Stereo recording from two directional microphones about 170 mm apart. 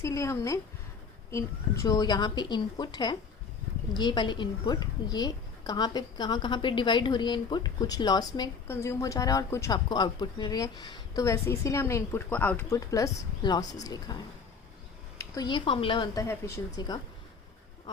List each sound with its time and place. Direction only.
0.0 s a woman's voice: 15° left (ahead or behind)
12.9 s a woman's voice: 20° left (ahead or behind)
15.2 s a woman's voice: 25° left (ahead or behind)